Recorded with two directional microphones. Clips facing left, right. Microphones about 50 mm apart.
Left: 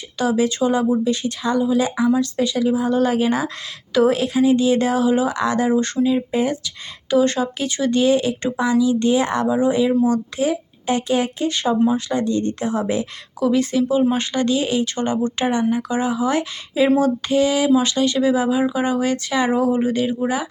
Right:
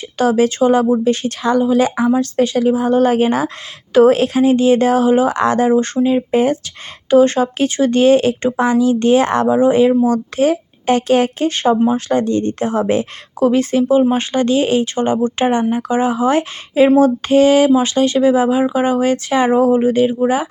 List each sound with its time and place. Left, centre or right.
0.2 s speech: right
2.1 s speech: right
4.0 s speech: right
5.7 s speech: right
6.3 s speech: right
7.1 s speech: right
9.5 s speech: right
11.5 s speech: right
13.5 s speech: right